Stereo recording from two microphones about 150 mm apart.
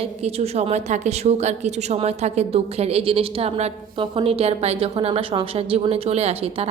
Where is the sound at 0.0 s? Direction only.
40° right (ahead or behind).